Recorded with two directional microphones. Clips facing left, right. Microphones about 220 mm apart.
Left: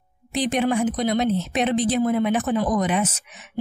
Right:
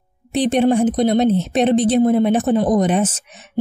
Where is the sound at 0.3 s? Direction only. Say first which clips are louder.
Right 6 dB; 30° right (ahead or behind).